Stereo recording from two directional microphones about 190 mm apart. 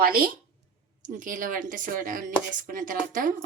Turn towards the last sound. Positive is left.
turn(degrees=-45)  # may be behind; listen again after turning